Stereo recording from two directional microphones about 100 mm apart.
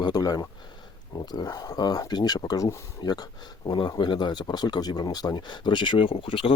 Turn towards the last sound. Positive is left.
turn(degrees=65)  # may be behind; listen again after turning